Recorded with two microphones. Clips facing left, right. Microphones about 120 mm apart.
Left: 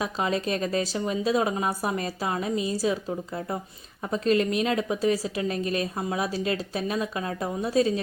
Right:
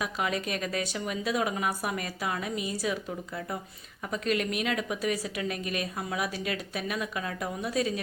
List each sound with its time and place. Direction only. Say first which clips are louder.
0.0 s speech: left 4 dB; 30° left (ahead or behind)